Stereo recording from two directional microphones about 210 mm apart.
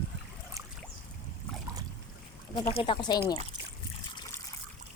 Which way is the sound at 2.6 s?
20° left (ahead or behind).